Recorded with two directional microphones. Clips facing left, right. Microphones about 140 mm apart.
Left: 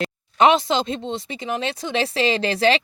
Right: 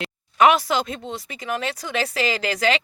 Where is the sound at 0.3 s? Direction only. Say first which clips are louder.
Left 1 dB; 25° left (ahead or behind).